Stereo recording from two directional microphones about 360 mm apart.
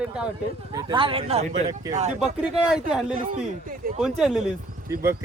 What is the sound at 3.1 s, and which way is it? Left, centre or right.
Speech, right.